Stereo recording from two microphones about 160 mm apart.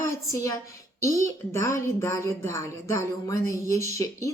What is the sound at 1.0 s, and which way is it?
Speech, 20° left (ahead or behind).